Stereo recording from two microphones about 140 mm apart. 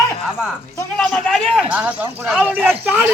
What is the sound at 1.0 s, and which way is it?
Speech, centre (ahead or behind).